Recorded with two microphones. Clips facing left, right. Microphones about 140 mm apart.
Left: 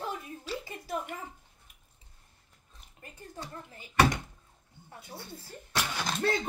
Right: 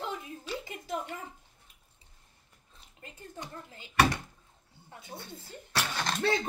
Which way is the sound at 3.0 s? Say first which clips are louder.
Even; 20° right (ahead or behind).